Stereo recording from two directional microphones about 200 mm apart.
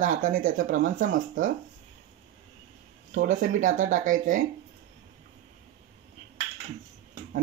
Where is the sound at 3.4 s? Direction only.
40° right (ahead or behind).